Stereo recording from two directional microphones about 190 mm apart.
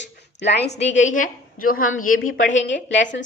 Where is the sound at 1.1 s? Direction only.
45° left (ahead or behind).